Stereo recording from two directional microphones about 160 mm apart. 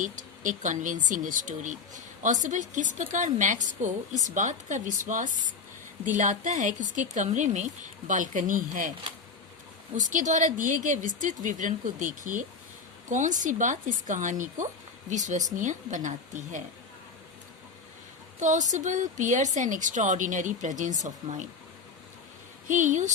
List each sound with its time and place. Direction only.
0.0 s a woman's voice: 50° right (ahead or behind)
9.9 s a woman's voice: 55° right (ahead or behind)
18.3 s a woman's voice: 50° right (ahead or behind)
22.7 s a woman's voice: 50° right (ahead or behind)